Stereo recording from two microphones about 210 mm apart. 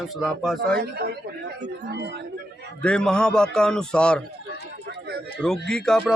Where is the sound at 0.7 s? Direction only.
50° right (ahead or behind).